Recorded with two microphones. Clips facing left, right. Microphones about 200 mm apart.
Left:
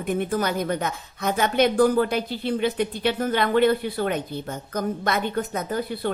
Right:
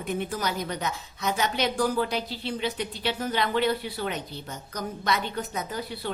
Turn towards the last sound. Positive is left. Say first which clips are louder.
# left 6 dB
turn(degrees=50)  # may be behind; listen again after turning